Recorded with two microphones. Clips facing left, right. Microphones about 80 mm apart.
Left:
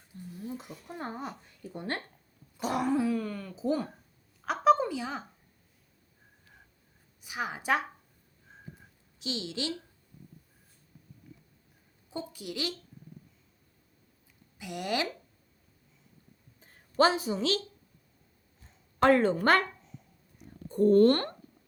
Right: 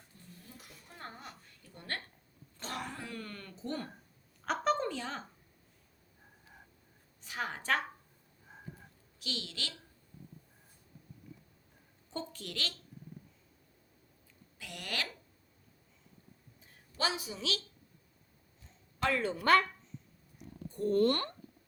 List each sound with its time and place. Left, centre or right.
0.3 s a sound: left
0.9 s a woman's voice: centre
2.6 s throat clearing: centre
4.4 s a sound: centre
7.2 s a woman's voice: centre
9.1 s a woman's voice: left
12.1 s a woman's voice: centre
14.6 s a woman's voice: centre
16.6 s a sound: left
18.9 s a woman's voice: left
20.7 s a child's voice: left